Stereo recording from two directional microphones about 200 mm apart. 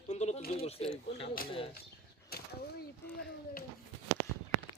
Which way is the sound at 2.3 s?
50° left (ahead or behind).